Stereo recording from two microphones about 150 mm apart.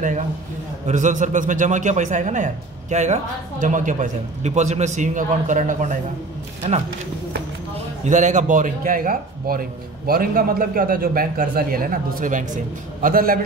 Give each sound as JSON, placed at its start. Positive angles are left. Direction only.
{"t": 0.8, "sound": "a man's voice", "side_deg": -55}
{"t": 8.0, "sound": "a man's voice", "side_deg": -55}